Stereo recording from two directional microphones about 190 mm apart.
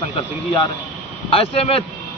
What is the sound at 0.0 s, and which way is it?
A man's voice, 25° left (ahead or behind).